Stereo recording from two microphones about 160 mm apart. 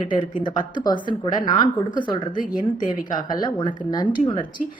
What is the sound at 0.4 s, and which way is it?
Speech, 30° left (ahead or behind).